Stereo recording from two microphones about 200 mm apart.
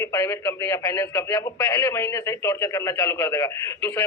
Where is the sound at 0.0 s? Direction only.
15° left (ahead or behind).